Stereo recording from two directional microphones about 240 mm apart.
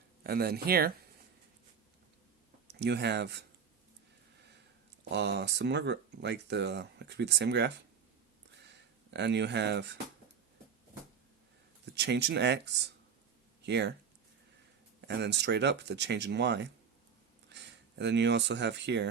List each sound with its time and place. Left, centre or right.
0.2 s speech: right
2.7 s speech: right
5.1 s speech: right
9.0 s speech: right
11.9 s speech: right
15.0 s speech: right